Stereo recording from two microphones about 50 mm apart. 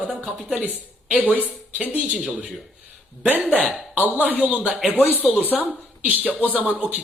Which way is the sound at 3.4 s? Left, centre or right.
Centre.